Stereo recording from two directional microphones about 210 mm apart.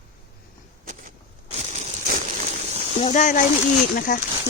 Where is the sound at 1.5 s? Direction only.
35° right (ahead or behind).